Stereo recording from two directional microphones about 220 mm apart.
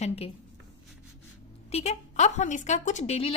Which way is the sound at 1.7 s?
30° left (ahead or behind).